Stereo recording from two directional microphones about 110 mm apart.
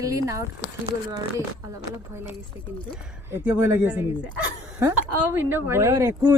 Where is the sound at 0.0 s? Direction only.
30° right (ahead or behind).